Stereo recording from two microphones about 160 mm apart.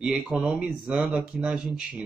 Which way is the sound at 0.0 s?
5° right (ahead or behind).